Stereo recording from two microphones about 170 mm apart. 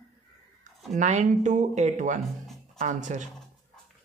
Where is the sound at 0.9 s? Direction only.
45° right (ahead or behind).